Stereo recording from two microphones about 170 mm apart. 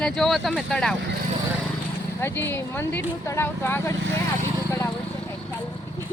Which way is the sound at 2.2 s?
10° left (ahead or behind).